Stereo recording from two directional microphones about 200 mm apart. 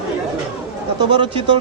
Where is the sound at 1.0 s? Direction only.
25° right (ahead or behind).